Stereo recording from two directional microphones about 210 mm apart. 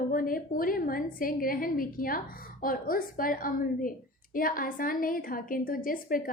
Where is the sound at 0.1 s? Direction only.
40° left (ahead or behind).